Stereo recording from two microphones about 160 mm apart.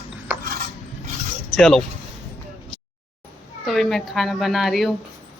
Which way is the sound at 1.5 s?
Centre (ahead or behind).